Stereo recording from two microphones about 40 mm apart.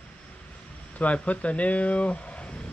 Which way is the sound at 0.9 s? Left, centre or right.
Left.